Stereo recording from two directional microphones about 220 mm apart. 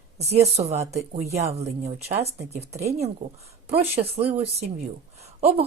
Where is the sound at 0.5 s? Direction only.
30° right (ahead or behind).